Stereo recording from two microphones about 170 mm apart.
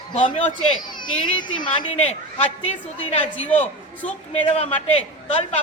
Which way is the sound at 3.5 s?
10° left (ahead or behind).